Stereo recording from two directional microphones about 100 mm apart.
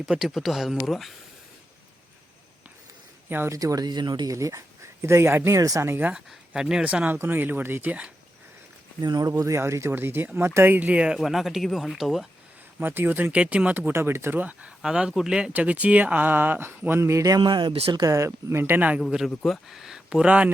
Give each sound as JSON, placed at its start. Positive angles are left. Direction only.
{"t": 0.0, "sound": "speech", "side_deg": -5}
{"t": 3.2, "sound": "speech", "side_deg": -20}
{"t": 3.5, "sound": "speech", "side_deg": -35}
{"t": 4.4, "sound": "speech", "side_deg": -35}
{"t": 5.9, "sound": "speech", "side_deg": -20}
{"t": 6.1, "sound": "speech", "side_deg": -5}
{"t": 9.0, "sound": "speech", "side_deg": -45}
{"t": 12.8, "sound": "speech", "side_deg": -20}
{"t": 17.4, "sound": "speech", "side_deg": -55}
{"t": 17.9, "sound": "speech", "side_deg": -35}
{"t": 18.4, "sound": "speech", "side_deg": -25}
{"t": 19.5, "sound": "speech", "side_deg": -5}